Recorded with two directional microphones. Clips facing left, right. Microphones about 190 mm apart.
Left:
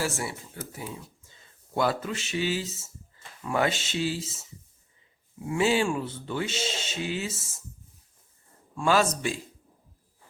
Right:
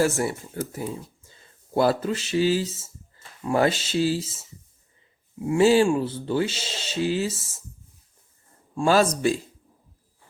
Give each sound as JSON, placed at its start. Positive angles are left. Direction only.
{"t": 0.0, "sound": "speech", "side_deg": -45}
{"t": 1.7, "sound": "speech", "side_deg": -35}
{"t": 5.5, "sound": "speech", "side_deg": -40}
{"t": 8.7, "sound": "speech", "side_deg": -35}